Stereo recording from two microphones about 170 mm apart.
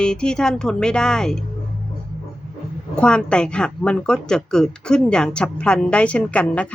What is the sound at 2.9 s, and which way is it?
A woman's voice, 5° left (ahead or behind).